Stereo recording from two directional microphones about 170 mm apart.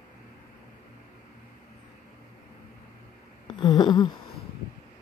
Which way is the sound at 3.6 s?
25° left (ahead or behind).